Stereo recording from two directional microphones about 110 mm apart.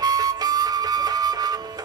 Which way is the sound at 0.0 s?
35° right (ahead or behind).